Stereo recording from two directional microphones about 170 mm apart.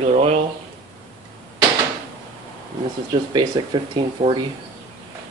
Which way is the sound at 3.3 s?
25° right (ahead or behind).